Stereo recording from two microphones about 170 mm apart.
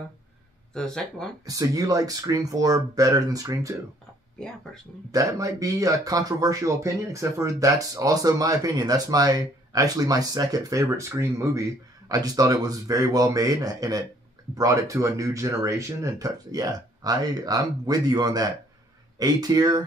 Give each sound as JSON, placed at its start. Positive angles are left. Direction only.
{"t": 0.7, "sound": "speech", "side_deg": 5}
{"t": 1.4, "sound": "speech", "side_deg": -20}
{"t": 5.1, "sound": "speech", "side_deg": -20}